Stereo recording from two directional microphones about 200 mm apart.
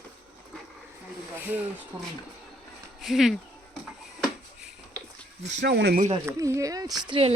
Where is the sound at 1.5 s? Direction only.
5° right (ahead or behind).